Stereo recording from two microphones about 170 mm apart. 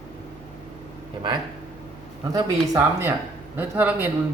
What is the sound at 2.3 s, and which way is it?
A man's voice, 20° right (ahead or behind).